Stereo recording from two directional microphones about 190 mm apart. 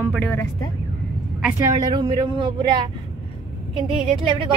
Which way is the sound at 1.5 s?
25° right (ahead or behind).